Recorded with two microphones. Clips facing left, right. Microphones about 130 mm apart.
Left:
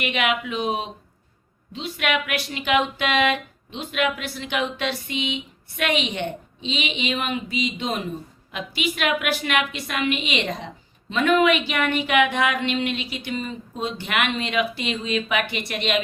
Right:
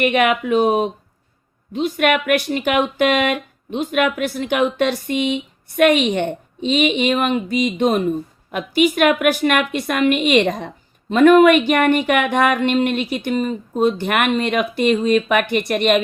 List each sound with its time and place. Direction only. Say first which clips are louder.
0.0 s speech: right 8 dB; 50° right (ahead or behind)